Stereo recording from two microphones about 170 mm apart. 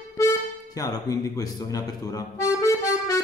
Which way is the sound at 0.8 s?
20° left (ahead or behind).